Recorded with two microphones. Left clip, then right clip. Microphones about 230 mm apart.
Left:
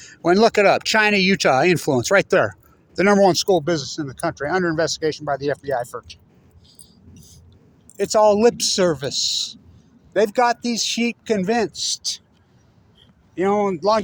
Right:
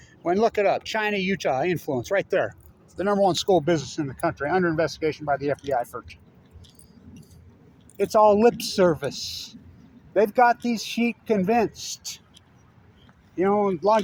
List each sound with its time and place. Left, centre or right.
0.0 s speech: left
3.4 s speech: left
7.9 s speech: left
13.3 s speech: left